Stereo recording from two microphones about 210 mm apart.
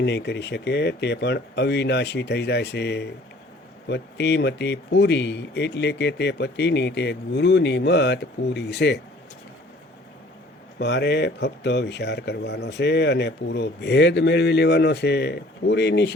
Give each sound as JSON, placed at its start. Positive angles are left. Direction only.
{"t": 0.0, "sound": "speech", "side_deg": 55}
{"t": 10.8, "sound": "speech", "side_deg": 50}